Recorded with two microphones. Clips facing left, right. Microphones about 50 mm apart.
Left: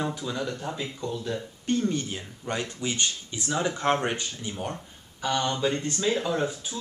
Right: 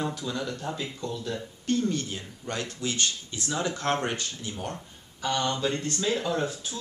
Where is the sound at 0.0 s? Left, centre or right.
Centre.